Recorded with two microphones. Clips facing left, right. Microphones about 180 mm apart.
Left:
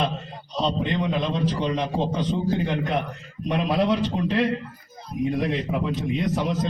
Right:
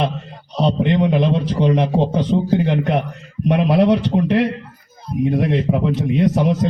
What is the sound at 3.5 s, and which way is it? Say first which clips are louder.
Speech: right 7 dB; 65° right (ahead or behind).